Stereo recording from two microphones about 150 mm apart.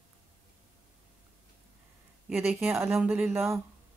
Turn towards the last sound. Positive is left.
turn(degrees=-10)  # may be behind; listen again after turning